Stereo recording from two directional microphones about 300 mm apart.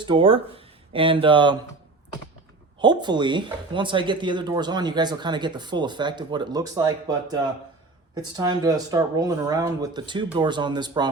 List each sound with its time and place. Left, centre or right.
0.0 s speech: centre
2.8 s speech: centre